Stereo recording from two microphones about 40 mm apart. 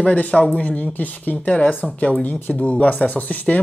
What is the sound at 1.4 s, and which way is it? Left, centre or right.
Speech, left.